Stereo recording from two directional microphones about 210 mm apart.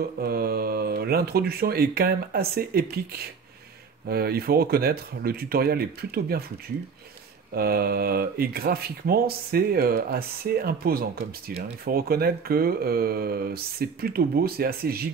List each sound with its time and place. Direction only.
0.2 s speech: 45° right (ahead or behind)
4.1 s speech: 45° right (ahead or behind)
7.5 s speech: 45° right (ahead or behind)